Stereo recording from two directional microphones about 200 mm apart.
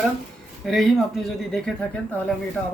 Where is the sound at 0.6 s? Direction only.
Centre (ahead or behind).